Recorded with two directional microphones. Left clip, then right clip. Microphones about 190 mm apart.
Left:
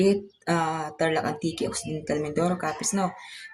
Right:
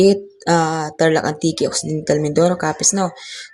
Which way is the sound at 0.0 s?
35° right (ahead or behind).